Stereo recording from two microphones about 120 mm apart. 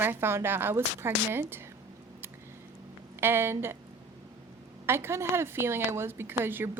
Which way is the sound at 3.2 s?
20° right (ahead or behind).